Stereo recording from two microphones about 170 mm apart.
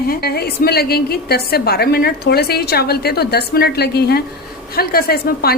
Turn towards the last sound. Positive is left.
turn(degrees=65)  # may be behind; listen again after turning